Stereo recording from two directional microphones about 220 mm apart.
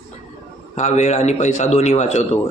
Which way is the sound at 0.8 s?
30° left (ahead or behind).